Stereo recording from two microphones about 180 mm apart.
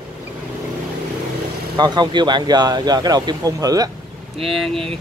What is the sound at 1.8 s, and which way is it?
Speech, 25° right (ahead or behind).